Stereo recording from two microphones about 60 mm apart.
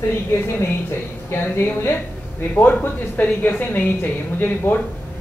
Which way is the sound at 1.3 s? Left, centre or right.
Left.